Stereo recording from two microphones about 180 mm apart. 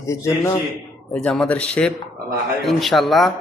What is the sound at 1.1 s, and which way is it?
Speech, 5° left (ahead or behind).